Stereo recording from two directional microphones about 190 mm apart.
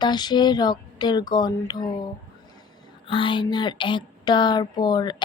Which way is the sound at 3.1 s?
25° left (ahead or behind).